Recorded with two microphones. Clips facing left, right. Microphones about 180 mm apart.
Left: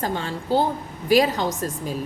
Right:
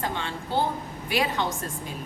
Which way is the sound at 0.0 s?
40° left (ahead or behind).